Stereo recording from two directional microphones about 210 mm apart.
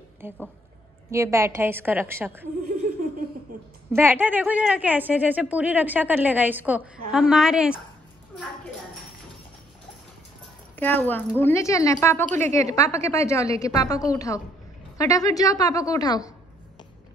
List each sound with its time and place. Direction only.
0.2 s a woman's voice: 10° right (ahead or behind)
3.9 s a woman's voice: 10° right (ahead or behind)
10.8 s speech: 10° left (ahead or behind)